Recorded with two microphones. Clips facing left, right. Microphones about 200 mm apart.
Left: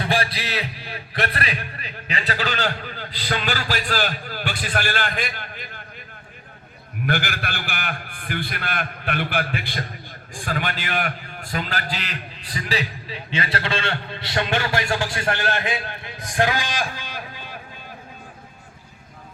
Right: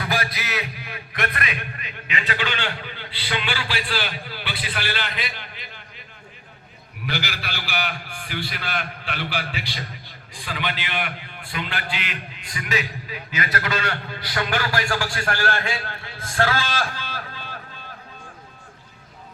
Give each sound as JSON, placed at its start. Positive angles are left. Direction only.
{"t": 0.0, "sound": "a man's voice", "side_deg": 30}
{"t": 7.0, "sound": "a man's voice", "side_deg": 50}